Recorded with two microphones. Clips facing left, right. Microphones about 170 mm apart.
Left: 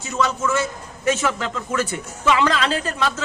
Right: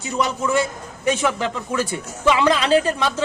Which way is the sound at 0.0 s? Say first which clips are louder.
Even; 15° right (ahead or behind).